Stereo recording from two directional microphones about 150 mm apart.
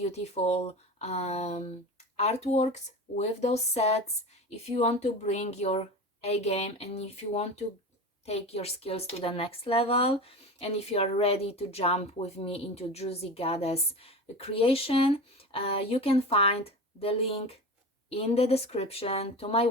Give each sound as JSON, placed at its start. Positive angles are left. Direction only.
{"t": 0.0, "sound": "speech", "side_deg": 45}